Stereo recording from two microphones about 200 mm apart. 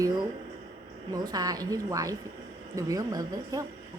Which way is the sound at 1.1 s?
20° right (ahead or behind).